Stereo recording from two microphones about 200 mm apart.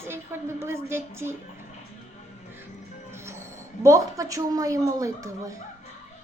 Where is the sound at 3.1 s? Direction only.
15° right (ahead or behind).